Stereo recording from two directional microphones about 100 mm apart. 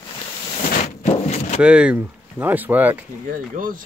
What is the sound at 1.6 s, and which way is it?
Speech, 10° right (ahead or behind).